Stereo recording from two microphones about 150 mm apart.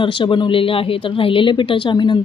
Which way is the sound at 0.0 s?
35° left (ahead or behind).